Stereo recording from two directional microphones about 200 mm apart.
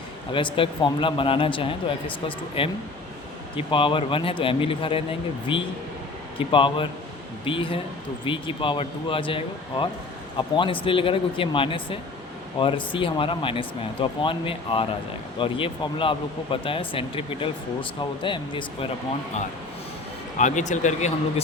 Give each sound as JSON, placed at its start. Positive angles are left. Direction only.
{"t": 0.3, "sound": "speech", "side_deg": 25}
{"t": 20.4, "sound": "speech", "side_deg": 40}